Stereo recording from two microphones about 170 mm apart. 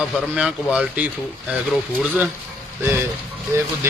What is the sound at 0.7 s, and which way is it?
Speech, 5° right (ahead or behind).